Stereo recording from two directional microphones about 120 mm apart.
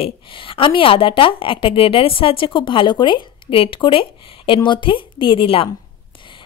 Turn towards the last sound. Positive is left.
turn(degrees=45)  # may be behind; listen again after turning